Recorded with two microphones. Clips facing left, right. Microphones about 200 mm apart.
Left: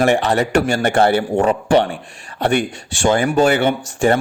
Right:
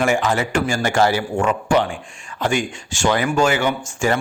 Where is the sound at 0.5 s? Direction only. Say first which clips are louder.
Left 4 dB; 65° left (ahead or behind).